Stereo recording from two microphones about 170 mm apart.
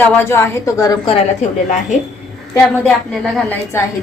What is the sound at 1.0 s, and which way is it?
Speech, 35° left (ahead or behind).